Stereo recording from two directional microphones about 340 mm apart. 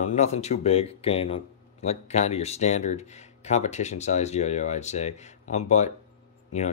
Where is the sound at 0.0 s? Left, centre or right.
Left.